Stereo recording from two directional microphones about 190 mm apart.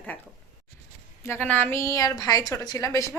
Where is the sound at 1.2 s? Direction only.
10° left (ahead or behind).